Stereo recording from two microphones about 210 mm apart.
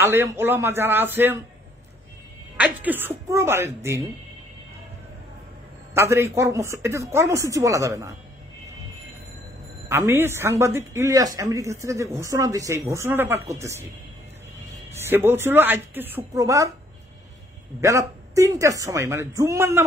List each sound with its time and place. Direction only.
0.0 s a woman's voice: 15° right (ahead or behind)
2.5 s a woman's voice: 5° right (ahead or behind)
5.9 s a woman's voice: 15° right (ahead or behind)
9.8 s a woman's voice: 10° right (ahead or behind)
14.9 s a woman's voice: 10° right (ahead or behind)
17.7 s a woman's voice: 15° right (ahead or behind)